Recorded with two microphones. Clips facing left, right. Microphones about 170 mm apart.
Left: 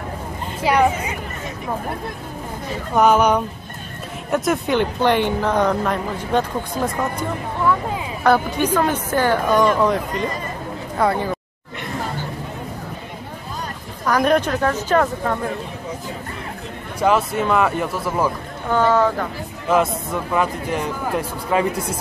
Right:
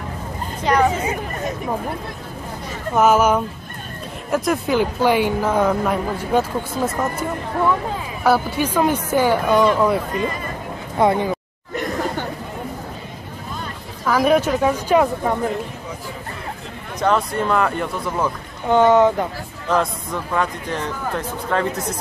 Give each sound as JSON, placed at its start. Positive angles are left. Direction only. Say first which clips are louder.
{"t": 0.6, "sound": "a woman's voice", "louder": "even", "side_deg": 5}
{"t": 3.0, "sound": "speech", "louder": "even", "side_deg": -5}
{"t": 8.3, "sound": "a woman's voice", "louder": "left 1 dB", "side_deg": -5}
{"t": 11.0, "sound": "speech", "louder": "right 3 dB", "side_deg": -20}
{"t": 14.0, "sound": "a woman's voice", "louder": "right 1 dB", "side_deg": -5}
{"t": 17.0, "sound": "speech", "louder": "left 1 dB", "side_deg": 5}
{"t": 18.7, "sound": "speech", "louder": "right 4 dB", "side_deg": -20}
{"t": 19.7, "sound": "a man's voice", "louder": "left 2 dB", "side_deg": 5}